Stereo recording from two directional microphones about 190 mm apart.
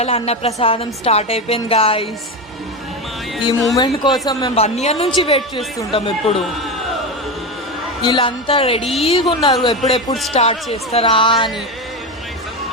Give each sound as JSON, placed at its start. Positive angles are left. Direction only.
{"t": 0.0, "sound": "speech", "side_deg": 30}
{"t": 3.8, "sound": "speech", "side_deg": 20}
{"t": 8.0, "sound": "speech", "side_deg": 25}
{"t": 8.8, "sound": "speech", "side_deg": 0}
{"t": 9.0, "sound": "speech", "side_deg": 25}